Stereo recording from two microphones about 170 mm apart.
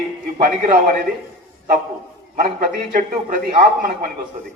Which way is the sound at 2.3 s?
55° right (ahead or behind).